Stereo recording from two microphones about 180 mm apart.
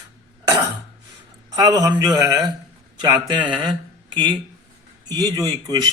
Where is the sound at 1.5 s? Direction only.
20° right (ahead or behind).